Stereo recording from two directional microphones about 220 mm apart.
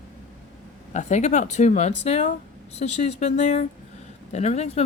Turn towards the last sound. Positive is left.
turn(degrees=30)  # may be behind; listen again after turning